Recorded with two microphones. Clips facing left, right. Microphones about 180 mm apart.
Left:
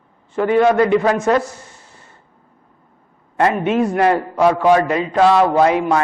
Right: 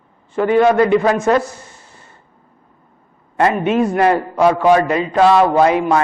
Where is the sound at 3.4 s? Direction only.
15° right (ahead or behind).